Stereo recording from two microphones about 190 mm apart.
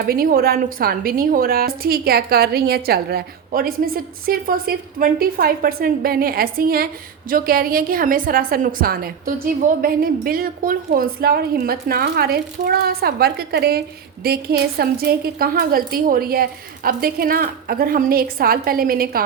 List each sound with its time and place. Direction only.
0.0 s a woman's voice: 50° right (ahead or behind)